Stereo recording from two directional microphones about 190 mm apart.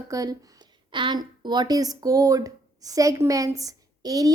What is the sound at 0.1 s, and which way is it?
A woman's voice, 20° right (ahead or behind).